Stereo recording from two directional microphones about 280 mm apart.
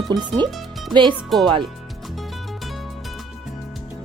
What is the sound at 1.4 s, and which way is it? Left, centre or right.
Speech, centre.